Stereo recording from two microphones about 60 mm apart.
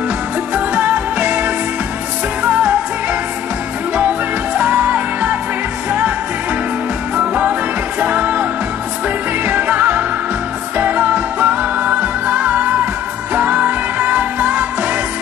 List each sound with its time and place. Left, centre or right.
0.6 s music: right
4.6 s music: right
7.2 s music: right
9.5 s music: right